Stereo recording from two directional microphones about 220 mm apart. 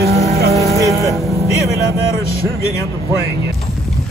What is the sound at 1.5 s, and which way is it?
Speech, 15° left (ahead or behind).